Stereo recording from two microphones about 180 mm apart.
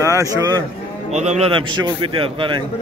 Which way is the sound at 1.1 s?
40° right (ahead or behind).